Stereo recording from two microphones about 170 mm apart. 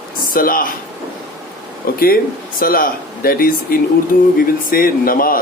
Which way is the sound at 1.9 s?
60° left (ahead or behind).